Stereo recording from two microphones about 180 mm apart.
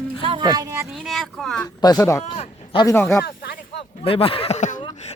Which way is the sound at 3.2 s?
60° left (ahead or behind).